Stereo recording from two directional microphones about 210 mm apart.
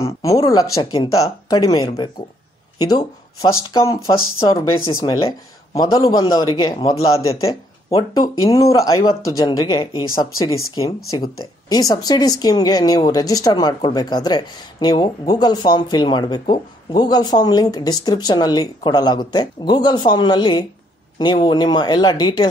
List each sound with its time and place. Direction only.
0.0 s a man's voice: 15° left (ahead or behind)